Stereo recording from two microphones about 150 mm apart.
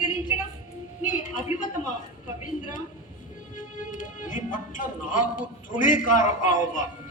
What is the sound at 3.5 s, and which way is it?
A man's voice, 60° left (ahead or behind).